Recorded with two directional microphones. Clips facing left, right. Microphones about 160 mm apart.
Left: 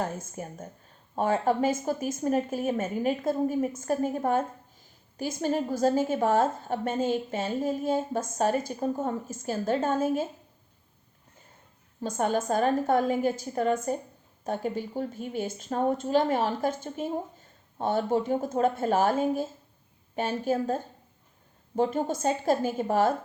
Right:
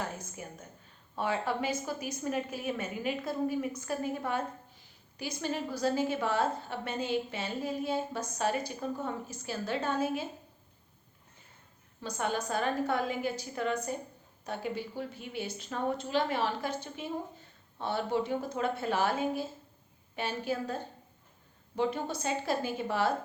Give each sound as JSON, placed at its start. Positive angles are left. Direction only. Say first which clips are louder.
{"t": 0.0, "sound": "a woman's voice", "louder": "left 6 dB", "side_deg": 45}
{"t": 12.0, "sound": "a woman's voice", "louder": "left 7 dB", "side_deg": 45}